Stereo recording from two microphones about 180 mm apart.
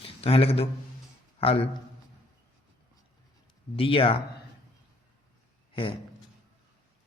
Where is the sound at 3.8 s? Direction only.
30° left (ahead or behind).